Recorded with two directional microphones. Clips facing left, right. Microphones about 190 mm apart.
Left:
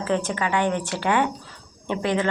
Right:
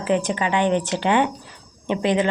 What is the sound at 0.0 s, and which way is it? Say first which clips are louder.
Speech: right 3 dB; 15° right (ahead or behind).